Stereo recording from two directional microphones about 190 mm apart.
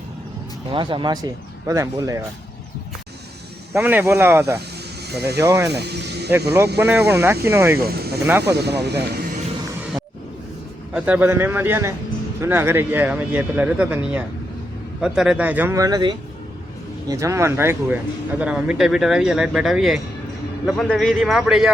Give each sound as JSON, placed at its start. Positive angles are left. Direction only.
{"t": 0.7, "sound": "speech", "side_deg": -25}
{"t": 3.8, "sound": "speech", "side_deg": -10}
{"t": 5.0, "sound": "speech", "side_deg": -60}
{"t": 5.4, "sound": "speech", "side_deg": -15}
{"t": 5.8, "sound": "speech", "side_deg": -60}
{"t": 6.7, "sound": "speech", "side_deg": -10}
{"t": 7.9, "sound": "speech", "side_deg": -55}
{"t": 10.9, "sound": "speech", "side_deg": -10}